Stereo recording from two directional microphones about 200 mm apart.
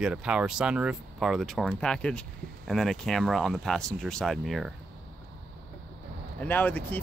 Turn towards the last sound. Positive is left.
turn(degrees=10)  # may be behind; listen again after turning